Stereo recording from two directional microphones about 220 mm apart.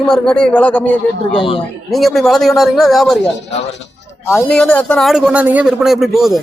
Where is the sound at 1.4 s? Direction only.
25° left (ahead or behind).